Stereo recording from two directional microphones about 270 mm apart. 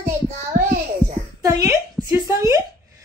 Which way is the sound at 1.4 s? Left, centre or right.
Centre.